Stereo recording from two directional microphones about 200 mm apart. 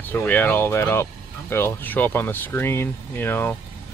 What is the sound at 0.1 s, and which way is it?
Speech, 10° left (ahead or behind).